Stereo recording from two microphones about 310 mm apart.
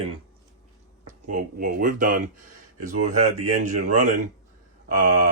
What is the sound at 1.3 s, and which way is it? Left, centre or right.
Speech, right.